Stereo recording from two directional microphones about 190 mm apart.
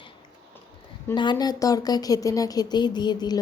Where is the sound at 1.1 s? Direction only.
25° left (ahead or behind).